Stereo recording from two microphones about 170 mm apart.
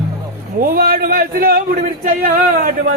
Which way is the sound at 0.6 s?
60° right (ahead or behind).